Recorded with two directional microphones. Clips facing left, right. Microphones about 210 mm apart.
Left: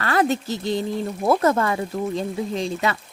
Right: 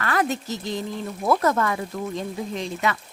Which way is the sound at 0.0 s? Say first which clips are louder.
Left 3 dB; 30° left (ahead or behind).